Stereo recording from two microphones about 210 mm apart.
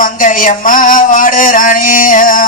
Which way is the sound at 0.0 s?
40° left (ahead or behind).